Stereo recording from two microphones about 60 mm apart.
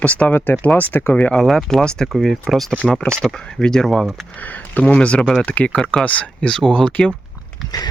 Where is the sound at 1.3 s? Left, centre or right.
Centre.